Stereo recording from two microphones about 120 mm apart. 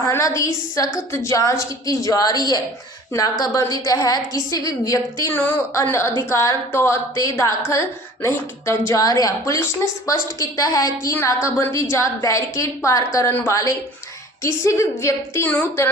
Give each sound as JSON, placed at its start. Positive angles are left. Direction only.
{"t": 0.0, "sound": "a woman's voice", "side_deg": 25}